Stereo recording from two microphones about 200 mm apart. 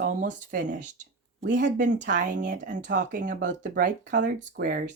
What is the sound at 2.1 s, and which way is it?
Speech, 40° right (ahead or behind).